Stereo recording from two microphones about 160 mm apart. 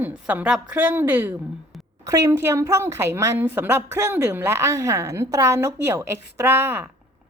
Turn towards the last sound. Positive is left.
turn(degrees=-15)  # may be behind; listen again after turning